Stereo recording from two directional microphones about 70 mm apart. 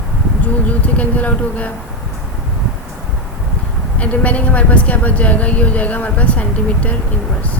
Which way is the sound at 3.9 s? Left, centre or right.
Left.